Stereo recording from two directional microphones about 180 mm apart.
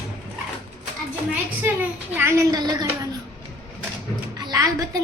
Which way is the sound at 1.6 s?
10° right (ahead or behind).